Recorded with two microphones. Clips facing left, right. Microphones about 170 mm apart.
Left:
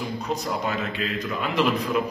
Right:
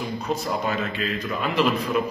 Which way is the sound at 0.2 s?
15° left (ahead or behind).